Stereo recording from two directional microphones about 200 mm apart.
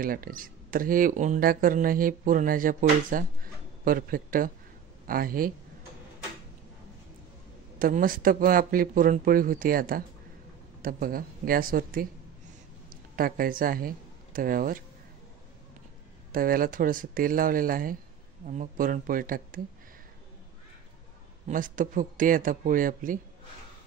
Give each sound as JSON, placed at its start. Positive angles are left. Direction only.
{"t": 0.0, "sound": "speech", "side_deg": -45}
{"t": 7.8, "sound": "speech", "side_deg": -45}
{"t": 13.1, "sound": "speech", "side_deg": -45}
{"t": 16.3, "sound": "speech", "side_deg": -45}
{"t": 21.5, "sound": "speech", "side_deg": -40}